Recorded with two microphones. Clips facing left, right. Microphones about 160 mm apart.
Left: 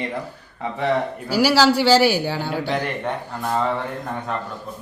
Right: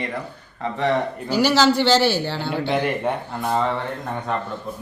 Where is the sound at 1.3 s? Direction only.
10° left (ahead or behind).